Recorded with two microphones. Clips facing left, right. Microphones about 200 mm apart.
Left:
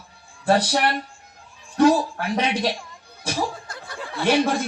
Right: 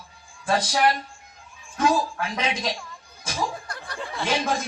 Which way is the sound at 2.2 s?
60° left (ahead or behind).